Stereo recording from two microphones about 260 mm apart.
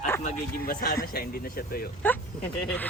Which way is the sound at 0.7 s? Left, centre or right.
Left.